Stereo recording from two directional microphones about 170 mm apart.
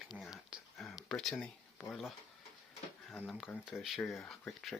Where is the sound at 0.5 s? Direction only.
Centre (ahead or behind).